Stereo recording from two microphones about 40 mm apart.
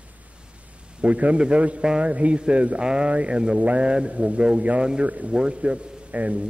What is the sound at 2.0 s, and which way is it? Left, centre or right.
A man's voice, right.